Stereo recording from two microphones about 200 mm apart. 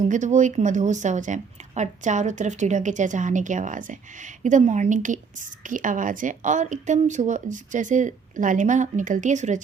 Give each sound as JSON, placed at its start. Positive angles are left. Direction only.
{"t": 0.1, "sound": "a woman's voice", "side_deg": -40}